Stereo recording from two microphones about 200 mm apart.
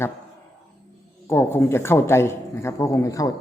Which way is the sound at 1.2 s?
10° left (ahead or behind).